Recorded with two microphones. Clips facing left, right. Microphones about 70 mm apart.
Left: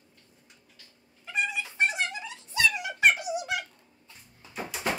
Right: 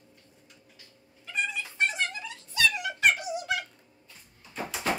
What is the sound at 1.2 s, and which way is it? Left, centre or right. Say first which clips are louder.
Cat: left 2 dB; centre.